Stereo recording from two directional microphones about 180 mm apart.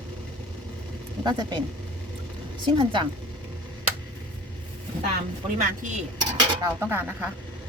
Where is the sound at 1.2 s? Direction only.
25° right (ahead or behind).